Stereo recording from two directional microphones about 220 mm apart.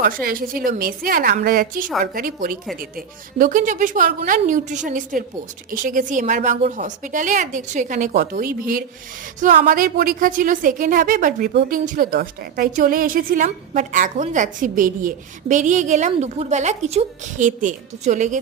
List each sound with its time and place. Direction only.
0.0 s a woman's voice: 40° right (ahead or behind)